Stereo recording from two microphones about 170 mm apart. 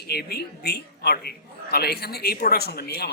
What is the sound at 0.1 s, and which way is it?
Speech, 70° left (ahead or behind).